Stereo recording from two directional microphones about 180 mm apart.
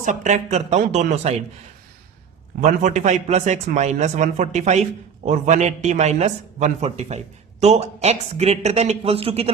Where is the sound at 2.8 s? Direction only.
40° right (ahead or behind).